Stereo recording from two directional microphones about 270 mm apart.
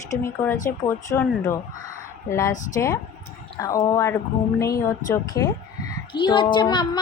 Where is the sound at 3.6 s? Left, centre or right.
Centre.